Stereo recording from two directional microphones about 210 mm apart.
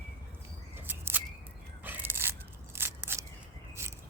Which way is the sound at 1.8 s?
10° right (ahead or behind).